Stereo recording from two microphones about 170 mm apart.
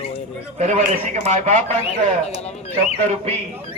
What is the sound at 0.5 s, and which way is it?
A man's voice, 45° right (ahead or behind).